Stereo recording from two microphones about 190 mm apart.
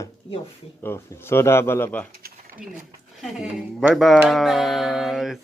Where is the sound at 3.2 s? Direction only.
Centre (ahead or behind).